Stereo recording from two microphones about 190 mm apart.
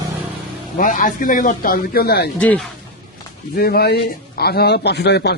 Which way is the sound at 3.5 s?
55° left (ahead or behind).